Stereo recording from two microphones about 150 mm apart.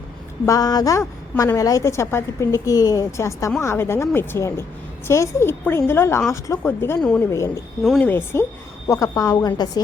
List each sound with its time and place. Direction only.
0.4 s a woman's voice: 25° left (ahead or behind); by 7.3 s 5° left (ahead or behind)
7.3 s a woman's voice: 20° left (ahead or behind)
7.9 s a woman's voice: 10° left (ahead or behind); by 9.5 s 25° left (ahead or behind)